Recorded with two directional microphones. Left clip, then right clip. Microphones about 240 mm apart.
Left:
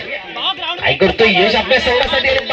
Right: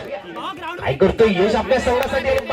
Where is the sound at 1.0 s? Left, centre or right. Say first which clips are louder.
Left 3 dB; left.